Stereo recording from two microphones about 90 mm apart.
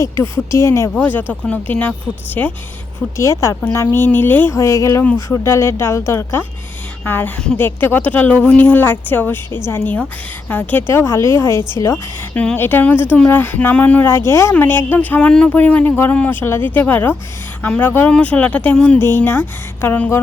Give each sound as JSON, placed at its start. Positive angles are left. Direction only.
{"t": 0.0, "sound": "speech", "side_deg": 30}
{"t": 0.9, "sound": "speech", "side_deg": 15}
{"t": 3.2, "sound": "speech", "side_deg": 35}
{"t": 4.5, "sound": "speech", "side_deg": 35}
{"t": 12.3, "sound": "speech", "side_deg": 15}
{"t": 14.3, "sound": "speech", "side_deg": 30}